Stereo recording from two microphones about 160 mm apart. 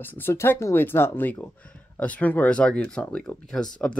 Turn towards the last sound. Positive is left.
turn(degrees=5)  # may be behind; listen again after turning